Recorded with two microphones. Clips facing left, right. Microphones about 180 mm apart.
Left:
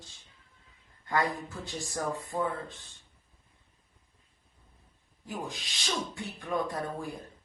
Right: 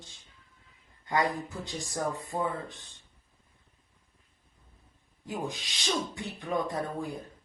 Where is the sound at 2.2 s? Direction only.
15° right (ahead or behind).